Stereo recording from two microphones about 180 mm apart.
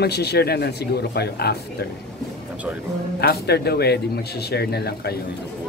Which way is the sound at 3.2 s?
65° left (ahead or behind).